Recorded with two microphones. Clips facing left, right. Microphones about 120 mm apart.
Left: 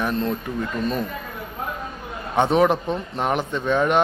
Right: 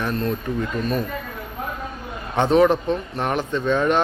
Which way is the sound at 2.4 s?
15° left (ahead or behind).